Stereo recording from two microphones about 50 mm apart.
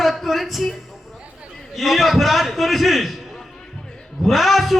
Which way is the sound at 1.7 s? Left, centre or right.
Centre.